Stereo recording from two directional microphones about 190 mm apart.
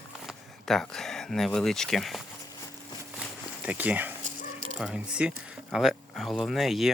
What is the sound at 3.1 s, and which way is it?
Walk, 5° right (ahead or behind).